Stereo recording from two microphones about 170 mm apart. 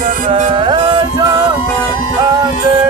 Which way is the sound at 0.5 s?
30° right (ahead or behind).